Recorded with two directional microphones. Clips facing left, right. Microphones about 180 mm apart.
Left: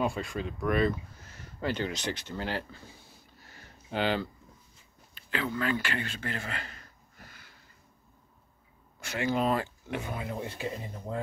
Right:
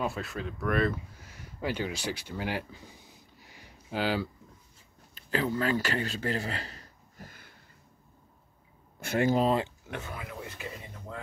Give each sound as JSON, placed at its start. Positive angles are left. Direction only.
{"t": 0.0, "sound": "speech", "side_deg": -5}
{"t": 1.2, "sound": "a sound", "side_deg": -10}
{"t": 5.1, "sound": "a sound", "side_deg": -40}
{"t": 9.0, "sound": "speech", "side_deg": -55}
{"t": 9.3, "sound": "speech", "side_deg": -30}
{"t": 10.0, "sound": "speech", "side_deg": 25}